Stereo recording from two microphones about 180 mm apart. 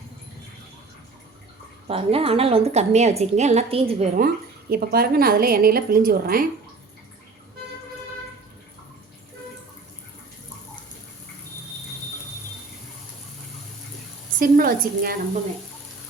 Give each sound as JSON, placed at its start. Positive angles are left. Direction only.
{"t": 1.9, "sound": "a woman's voice", "side_deg": -30}
{"t": 4.7, "sound": "a woman's voice", "side_deg": -60}
{"t": 14.3, "sound": "a sound", "side_deg": -50}